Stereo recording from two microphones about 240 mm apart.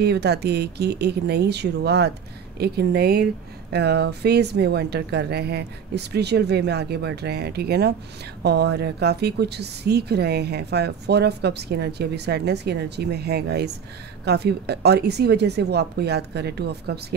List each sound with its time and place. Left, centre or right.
0.0 s a woman's voice: right